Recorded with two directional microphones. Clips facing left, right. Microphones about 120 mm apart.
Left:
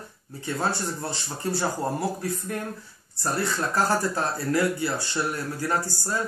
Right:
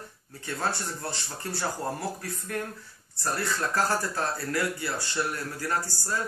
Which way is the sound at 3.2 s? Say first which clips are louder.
Left 3 dB; 20° left (ahead or behind).